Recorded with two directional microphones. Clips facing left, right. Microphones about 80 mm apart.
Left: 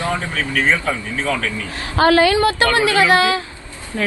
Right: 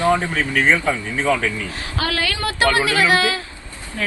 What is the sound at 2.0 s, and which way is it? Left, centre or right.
Speech, left.